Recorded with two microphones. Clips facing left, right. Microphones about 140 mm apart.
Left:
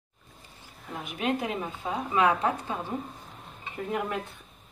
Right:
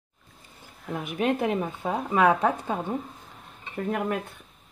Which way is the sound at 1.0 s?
50° right (ahead or behind).